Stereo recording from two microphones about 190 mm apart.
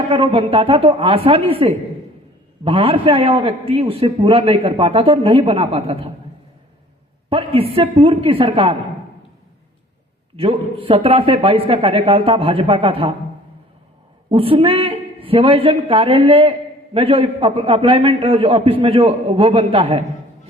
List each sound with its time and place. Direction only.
0.1 s a man's voice: 30° right (ahead or behind)
7.3 s a man's voice: 30° right (ahead or behind)
10.3 s a man's voice: 30° right (ahead or behind)
14.3 s a man's voice: 30° right (ahead or behind)